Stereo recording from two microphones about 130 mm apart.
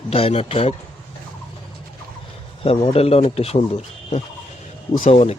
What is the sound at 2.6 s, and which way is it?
Speech, 50° left (ahead or behind).